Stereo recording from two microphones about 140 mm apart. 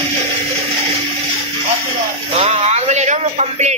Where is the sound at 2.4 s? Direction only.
50° right (ahead or behind).